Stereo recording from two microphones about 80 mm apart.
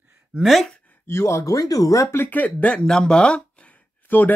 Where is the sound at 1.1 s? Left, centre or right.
Left.